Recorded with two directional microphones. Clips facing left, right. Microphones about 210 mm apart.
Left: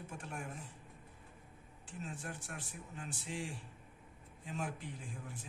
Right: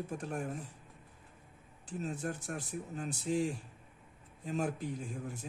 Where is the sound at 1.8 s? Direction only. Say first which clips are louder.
Right 8 dB; 40° right (ahead or behind).